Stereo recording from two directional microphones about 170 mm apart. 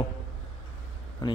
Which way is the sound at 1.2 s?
25° left (ahead or behind).